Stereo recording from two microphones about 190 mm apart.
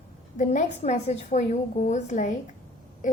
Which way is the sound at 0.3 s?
40° left (ahead or behind).